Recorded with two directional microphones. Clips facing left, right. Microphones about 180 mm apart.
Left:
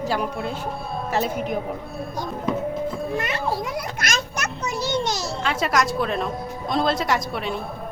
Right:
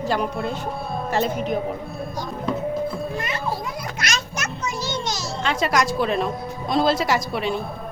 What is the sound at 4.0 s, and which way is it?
Music, 50° left (ahead or behind).